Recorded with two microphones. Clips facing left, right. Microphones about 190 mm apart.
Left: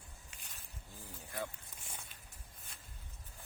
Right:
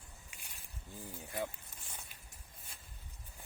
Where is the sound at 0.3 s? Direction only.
10° right (ahead or behind).